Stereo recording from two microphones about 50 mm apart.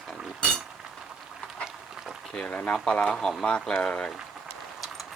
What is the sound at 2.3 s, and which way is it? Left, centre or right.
Speech, centre.